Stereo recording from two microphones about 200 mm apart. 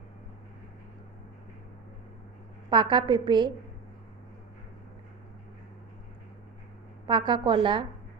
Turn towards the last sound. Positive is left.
turn(degrees=-25)  # may be behind; listen again after turning